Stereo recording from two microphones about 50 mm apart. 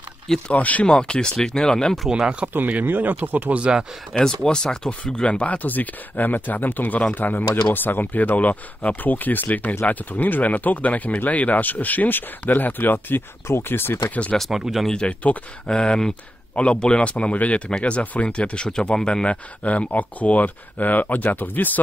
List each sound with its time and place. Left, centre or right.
0.5 s speech: left
0.8 s speech: centre
2.0 s speech: centre
2.8 s speech: right
3.5 s speech: right
4.2 s speech: centre; by 13.2 s left
13.5 s speech: left
14.5 s speech: centre
14.9 s speech: centre
19.2 s speech: left